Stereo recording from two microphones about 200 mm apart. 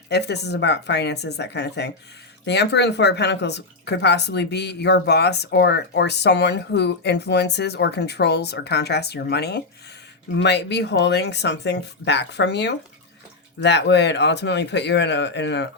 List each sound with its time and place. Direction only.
0.1 s speech: 55° left (ahead or behind)